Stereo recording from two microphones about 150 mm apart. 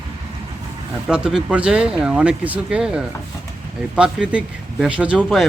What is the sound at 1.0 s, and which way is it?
Speech, 5° right (ahead or behind).